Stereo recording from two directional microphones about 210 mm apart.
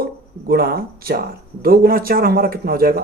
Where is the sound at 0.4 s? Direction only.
45° right (ahead or behind).